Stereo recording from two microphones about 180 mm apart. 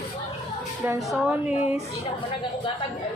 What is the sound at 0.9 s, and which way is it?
Speech, 10° right (ahead or behind).